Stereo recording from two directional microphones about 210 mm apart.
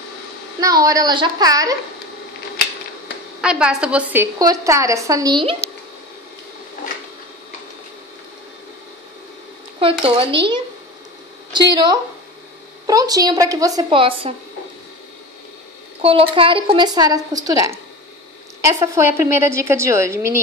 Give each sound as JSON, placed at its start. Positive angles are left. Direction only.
{"t": 0.6, "sound": "a woman's voice", "side_deg": -15}
{"t": 3.3, "sound": "a woman's voice", "side_deg": -5}
{"t": 9.8, "sound": "speech", "side_deg": -25}
{"t": 11.7, "sound": "a woman's voice", "side_deg": -20}
{"t": 16.0, "sound": "a woman's voice", "side_deg": -25}